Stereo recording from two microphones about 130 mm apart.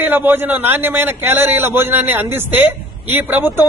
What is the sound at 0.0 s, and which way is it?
A man's voice, 15° right (ahead or behind).